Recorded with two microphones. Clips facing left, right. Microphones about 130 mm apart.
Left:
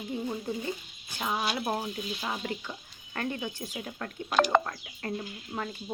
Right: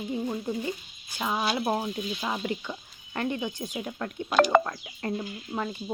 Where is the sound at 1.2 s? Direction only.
25° right (ahead or behind).